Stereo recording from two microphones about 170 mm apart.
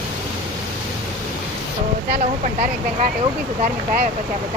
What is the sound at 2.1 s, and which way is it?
Speech, 45° right (ahead or behind).